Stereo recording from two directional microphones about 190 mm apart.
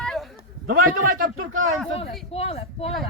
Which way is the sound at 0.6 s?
45° right (ahead or behind).